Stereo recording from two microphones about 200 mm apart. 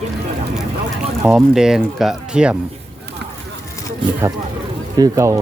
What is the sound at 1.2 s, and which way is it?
Speech, 5° right (ahead or behind).